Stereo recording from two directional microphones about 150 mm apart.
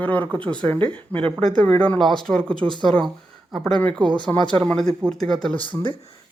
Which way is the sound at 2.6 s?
35° right (ahead or behind).